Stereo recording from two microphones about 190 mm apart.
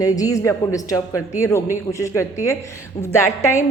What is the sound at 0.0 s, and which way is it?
A woman's voice, 20° left (ahead or behind).